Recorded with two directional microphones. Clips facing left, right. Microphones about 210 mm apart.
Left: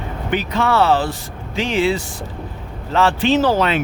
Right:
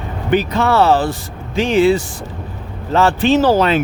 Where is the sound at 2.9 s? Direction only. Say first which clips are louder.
Right 3 dB; 45° right (ahead or behind).